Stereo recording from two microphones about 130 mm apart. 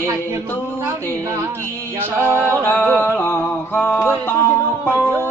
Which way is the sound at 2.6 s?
15° left (ahead or behind).